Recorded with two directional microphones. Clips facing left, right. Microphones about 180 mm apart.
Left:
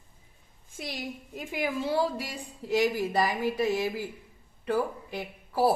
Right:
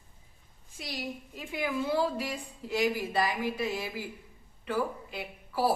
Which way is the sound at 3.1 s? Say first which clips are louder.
Left 3 dB; 45° left (ahead or behind).